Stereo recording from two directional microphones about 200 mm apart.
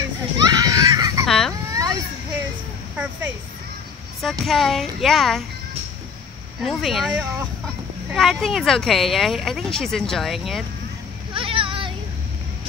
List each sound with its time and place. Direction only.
0.4 s a sound: 20° right (ahead or behind)
1.2 s baby cry: centre (ahead or behind)
1.7 s children playing: 15° right (ahead or behind)
4.2 s speech: centre (ahead or behind)
6.6 s speech: centre (ahead or behind)
11.3 s a sound: 25° right (ahead or behind)